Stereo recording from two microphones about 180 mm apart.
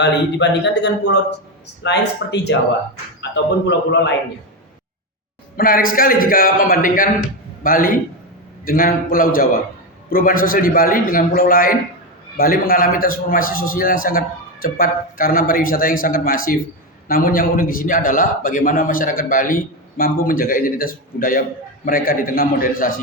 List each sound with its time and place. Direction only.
0.0 s a man's voice: 75° left (ahead or behind)
5.5 s a man's voice: 50° left (ahead or behind)